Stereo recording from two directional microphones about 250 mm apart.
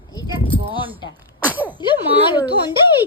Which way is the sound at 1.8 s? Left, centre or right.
Centre.